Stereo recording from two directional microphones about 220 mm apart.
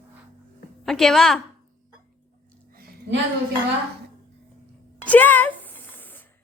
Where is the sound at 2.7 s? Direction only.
45° right (ahead or behind).